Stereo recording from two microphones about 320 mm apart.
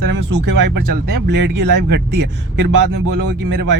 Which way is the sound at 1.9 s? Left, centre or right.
Right.